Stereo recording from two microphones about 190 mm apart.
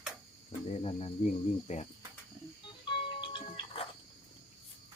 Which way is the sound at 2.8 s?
25° left (ahead or behind).